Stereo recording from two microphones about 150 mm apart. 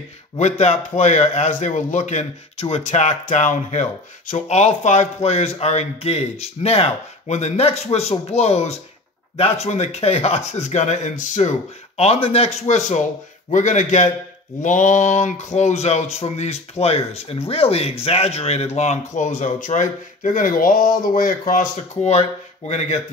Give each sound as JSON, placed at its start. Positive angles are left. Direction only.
{"t": 0.4, "sound": "a man's voice", "side_deg": 50}
{"t": 12.0, "sound": "a man's voice", "side_deg": 40}